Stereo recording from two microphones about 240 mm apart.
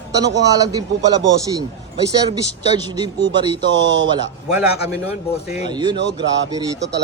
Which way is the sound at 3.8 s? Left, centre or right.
Right.